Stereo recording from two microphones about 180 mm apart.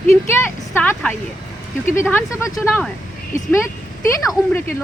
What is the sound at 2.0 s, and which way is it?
Speech, 15° left (ahead or behind).